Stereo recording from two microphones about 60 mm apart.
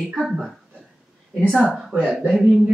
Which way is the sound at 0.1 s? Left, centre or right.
Centre.